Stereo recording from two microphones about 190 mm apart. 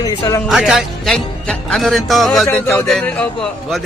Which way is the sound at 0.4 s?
Centre (ahead or behind).